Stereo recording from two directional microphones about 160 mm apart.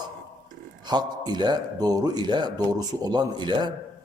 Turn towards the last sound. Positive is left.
turn(degrees=-25)  # may be behind; listen again after turning